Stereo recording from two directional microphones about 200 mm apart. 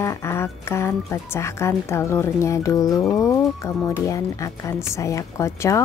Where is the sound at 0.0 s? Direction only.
15° left (ahead or behind).